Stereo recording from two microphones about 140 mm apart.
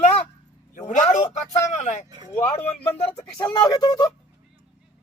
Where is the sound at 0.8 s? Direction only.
60° left (ahead or behind).